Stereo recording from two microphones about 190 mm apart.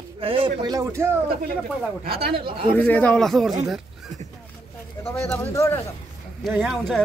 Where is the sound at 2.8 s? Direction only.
10° left (ahead or behind).